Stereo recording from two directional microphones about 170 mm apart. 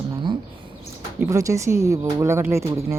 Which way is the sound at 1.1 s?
20° right (ahead or behind).